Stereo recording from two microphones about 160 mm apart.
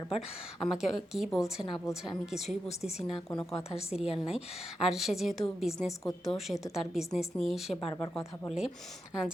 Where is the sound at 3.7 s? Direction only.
5° right (ahead or behind).